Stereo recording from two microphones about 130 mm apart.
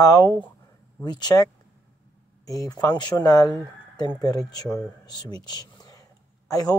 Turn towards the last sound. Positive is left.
turn(degrees=30)  # may be behind; listen again after turning